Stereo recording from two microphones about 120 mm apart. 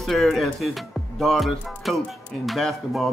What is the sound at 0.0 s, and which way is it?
Speech, centre (ahead or behind).